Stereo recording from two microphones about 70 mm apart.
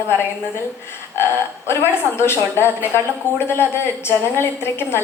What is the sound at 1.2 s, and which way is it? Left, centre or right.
Speech, left.